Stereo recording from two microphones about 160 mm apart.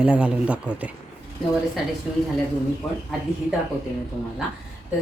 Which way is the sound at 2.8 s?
25° left (ahead or behind).